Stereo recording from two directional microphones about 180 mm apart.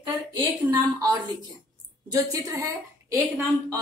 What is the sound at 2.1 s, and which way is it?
Speech, 20° right (ahead or behind).